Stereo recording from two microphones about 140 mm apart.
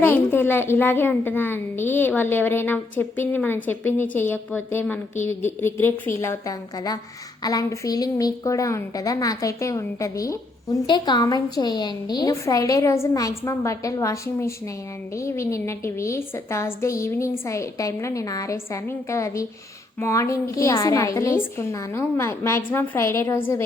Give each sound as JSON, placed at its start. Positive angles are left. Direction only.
{"t": 0.0, "sound": "a woman's voice", "side_deg": 15}